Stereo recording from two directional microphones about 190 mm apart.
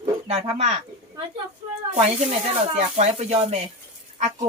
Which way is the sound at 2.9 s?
35° right (ahead or behind).